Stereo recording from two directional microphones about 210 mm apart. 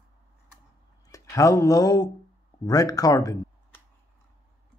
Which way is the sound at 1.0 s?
15° left (ahead or behind).